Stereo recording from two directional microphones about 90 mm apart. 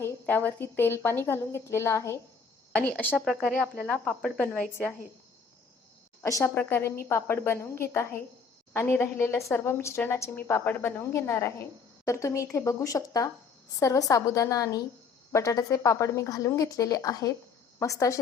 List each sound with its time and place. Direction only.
0.0 s a woman's voice: 20° left (ahead or behind)
6.4 s a woman's voice: 25° left (ahead or behind)